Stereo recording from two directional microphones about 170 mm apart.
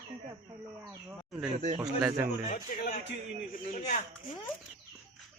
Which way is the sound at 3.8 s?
45° left (ahead or behind).